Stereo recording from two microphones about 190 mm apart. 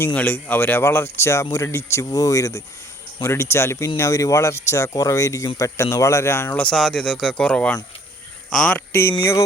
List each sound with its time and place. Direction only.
0.0 s speech: 10° left (ahead or behind)